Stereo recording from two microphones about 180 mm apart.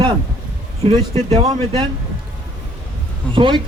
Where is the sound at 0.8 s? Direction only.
35° right (ahead or behind).